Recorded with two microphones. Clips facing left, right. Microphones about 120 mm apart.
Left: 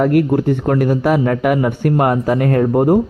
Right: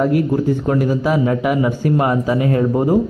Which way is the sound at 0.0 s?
65° left (ahead or behind).